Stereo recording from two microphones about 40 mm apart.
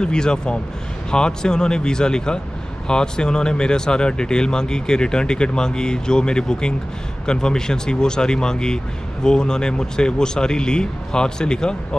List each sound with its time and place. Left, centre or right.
0.0 s speech: left